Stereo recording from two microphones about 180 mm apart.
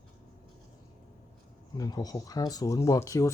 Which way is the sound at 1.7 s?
20° left (ahead or behind).